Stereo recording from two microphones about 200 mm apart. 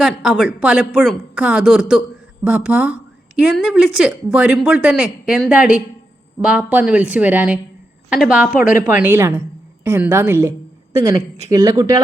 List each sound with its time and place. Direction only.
0.0 s a woman's voice: centre (ahead or behind)